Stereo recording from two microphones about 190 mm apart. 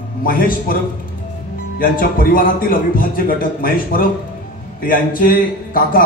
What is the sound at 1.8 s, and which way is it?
A man's voice, 50° left (ahead or behind).